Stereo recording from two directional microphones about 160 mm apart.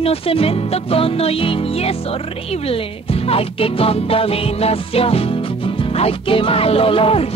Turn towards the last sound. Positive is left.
turn(degrees=35)  # may be behind; listen again after turning